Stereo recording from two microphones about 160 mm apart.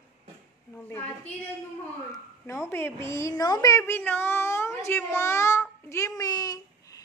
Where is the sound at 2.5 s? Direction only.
15° left (ahead or behind).